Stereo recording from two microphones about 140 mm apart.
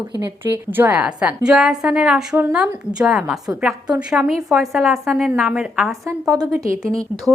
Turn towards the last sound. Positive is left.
turn(degrees=-25)  # may be behind; listen again after turning